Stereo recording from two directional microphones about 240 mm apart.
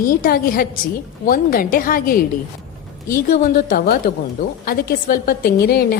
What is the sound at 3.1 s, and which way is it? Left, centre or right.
A woman's voice, left.